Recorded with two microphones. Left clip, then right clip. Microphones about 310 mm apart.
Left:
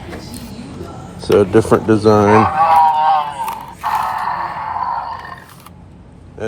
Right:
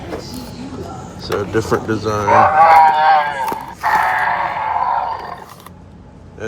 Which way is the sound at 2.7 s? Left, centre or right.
Right.